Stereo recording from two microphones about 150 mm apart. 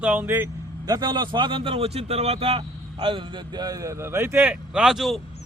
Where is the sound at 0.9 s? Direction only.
25° right (ahead or behind); by 5.2 s centre (ahead or behind).